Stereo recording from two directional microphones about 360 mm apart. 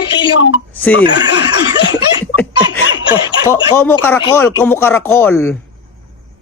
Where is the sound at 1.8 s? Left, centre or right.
Left.